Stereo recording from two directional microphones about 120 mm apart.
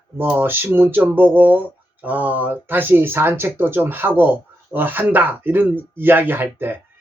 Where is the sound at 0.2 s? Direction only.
15° right (ahead or behind).